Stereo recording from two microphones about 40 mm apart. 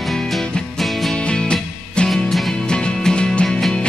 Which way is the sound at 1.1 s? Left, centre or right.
Left.